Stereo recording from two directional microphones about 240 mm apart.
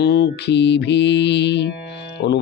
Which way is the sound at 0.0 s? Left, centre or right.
Left.